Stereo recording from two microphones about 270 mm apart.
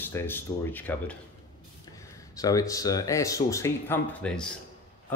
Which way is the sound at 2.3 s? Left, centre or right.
Centre.